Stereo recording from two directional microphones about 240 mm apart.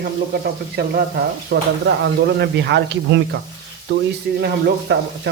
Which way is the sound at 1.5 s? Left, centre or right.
Right.